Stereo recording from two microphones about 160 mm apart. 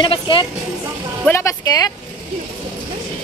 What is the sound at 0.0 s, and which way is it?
Speech, 30° left (ahead or behind).